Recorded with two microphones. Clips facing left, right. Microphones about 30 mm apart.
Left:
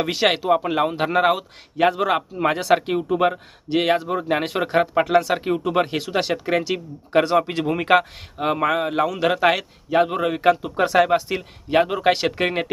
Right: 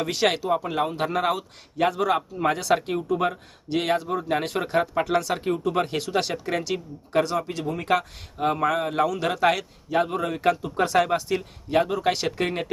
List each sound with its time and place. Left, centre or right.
0.0 s a man's voice: left
5.8 s a man's voice: centre; by 7.9 s left
7.9 s a man's voice: left
11.7 s a man's voice: left